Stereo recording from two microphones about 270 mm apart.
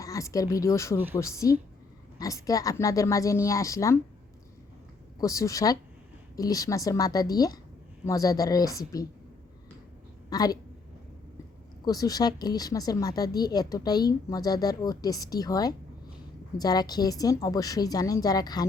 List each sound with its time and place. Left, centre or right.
0.0 s speech: centre
5.2 s speech: centre
10.2 s a woman's voice: centre
11.9 s speech: centre